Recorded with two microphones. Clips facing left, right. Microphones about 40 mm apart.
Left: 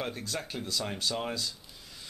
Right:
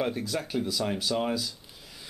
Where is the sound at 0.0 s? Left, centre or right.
Centre.